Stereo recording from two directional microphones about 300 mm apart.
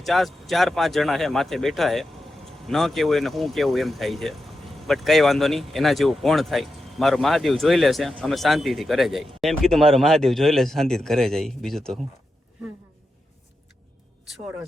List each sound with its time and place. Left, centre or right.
0.0 s speech: centre